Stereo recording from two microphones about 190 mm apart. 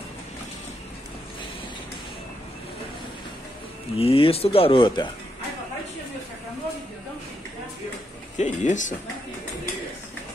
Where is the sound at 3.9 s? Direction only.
30° left (ahead or behind).